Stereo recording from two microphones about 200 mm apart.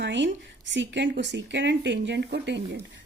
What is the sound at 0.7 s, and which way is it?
Speech, 65° right (ahead or behind).